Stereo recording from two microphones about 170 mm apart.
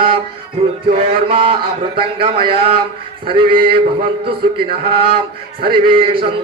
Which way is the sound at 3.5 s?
60° right (ahead or behind).